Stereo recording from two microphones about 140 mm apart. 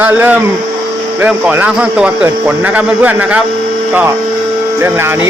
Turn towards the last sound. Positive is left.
turn(degrees=-15)  # may be behind; listen again after turning